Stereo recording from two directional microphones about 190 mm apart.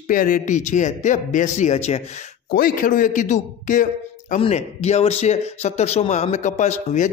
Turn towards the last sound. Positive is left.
turn(degrees=40)  # may be behind; listen again after turning